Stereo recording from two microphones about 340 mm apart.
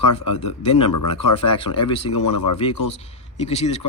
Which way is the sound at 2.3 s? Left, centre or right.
Left.